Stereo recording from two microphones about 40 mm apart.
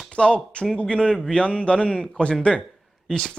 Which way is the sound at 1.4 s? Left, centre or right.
Left.